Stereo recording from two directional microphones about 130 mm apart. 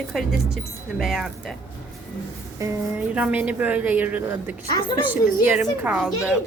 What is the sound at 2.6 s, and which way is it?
A woman's voice, 10° right (ahead or behind).